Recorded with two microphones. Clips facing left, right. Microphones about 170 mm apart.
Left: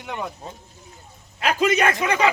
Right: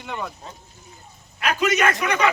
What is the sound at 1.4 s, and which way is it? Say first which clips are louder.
Speech: left 1 dB; 30° left (ahead or behind).